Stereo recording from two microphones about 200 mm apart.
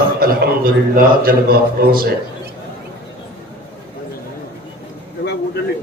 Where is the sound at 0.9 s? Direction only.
45° right (ahead or behind).